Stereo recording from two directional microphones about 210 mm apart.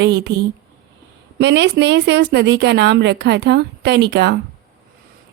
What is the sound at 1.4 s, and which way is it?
A woman's voice, 55° right (ahead or behind).